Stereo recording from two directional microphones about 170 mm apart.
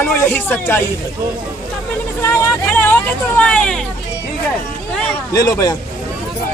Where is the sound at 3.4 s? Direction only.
5° left (ahead or behind).